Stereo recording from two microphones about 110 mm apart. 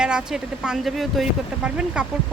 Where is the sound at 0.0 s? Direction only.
10° right (ahead or behind).